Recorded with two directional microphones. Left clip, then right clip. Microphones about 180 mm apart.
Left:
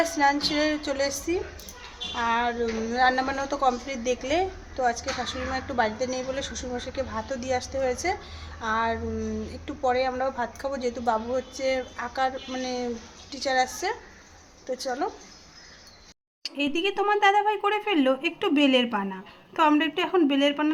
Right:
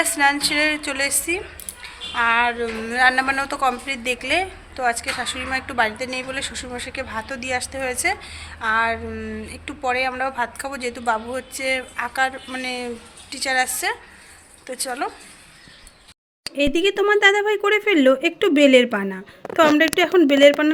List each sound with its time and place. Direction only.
0.0 s a woman's voice: 5° left (ahead or behind)
16.6 s speech: 30° right (ahead or behind)